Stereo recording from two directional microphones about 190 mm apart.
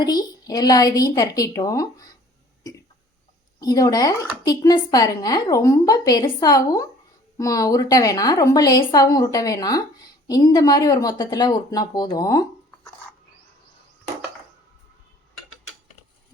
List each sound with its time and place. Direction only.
0.0 s speech: 20° left (ahead or behind)
3.6 s speech: 20° left (ahead or behind)